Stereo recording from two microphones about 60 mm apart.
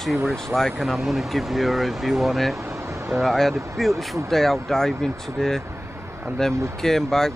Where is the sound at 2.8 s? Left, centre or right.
Right.